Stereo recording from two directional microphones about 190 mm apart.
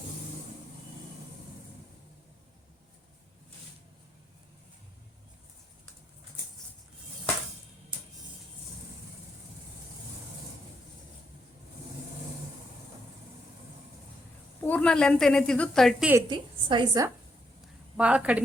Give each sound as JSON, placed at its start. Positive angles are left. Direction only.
{"t": 14.6, "sound": "a woman's voice", "side_deg": 10}
{"t": 16.3, "sound": "a woman's voice", "side_deg": -25}
{"t": 17.9, "sound": "a woman's voice", "side_deg": -5}